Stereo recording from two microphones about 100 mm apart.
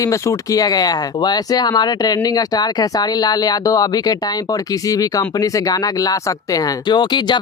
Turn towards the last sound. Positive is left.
turn(degrees=50)  # may be behind; listen again after turning